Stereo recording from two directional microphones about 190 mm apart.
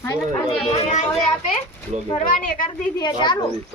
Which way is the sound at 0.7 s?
35° left (ahead or behind).